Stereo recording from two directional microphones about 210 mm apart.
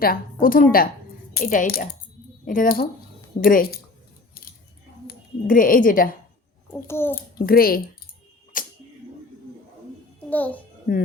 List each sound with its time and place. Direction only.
0.4 s speech: 40° left (ahead or behind)
5.0 s speech: 40° left (ahead or behind)
6.7 s a child's voice: 10° left (ahead or behind)
7.2 s speech: 45° left (ahead or behind)
8.5 s a sound: 40° left (ahead or behind)
10.2 s a child's voice: 10° left (ahead or behind)
10.9 s speech: 40° left (ahead or behind)